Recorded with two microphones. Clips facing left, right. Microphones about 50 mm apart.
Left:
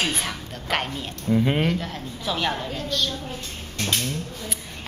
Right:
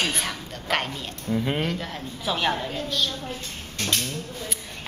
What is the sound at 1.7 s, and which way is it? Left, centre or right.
Speech, centre.